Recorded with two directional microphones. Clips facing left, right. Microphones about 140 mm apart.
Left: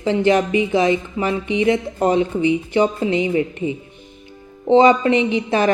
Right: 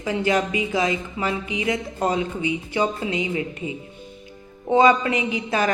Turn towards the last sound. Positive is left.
turn(degrees=25)  # may be behind; listen again after turning